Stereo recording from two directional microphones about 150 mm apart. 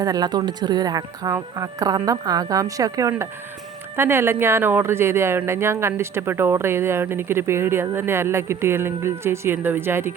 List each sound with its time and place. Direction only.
0.0 s speech: 25° right (ahead or behind)